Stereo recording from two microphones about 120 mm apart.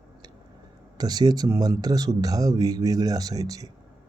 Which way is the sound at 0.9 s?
35° right (ahead or behind).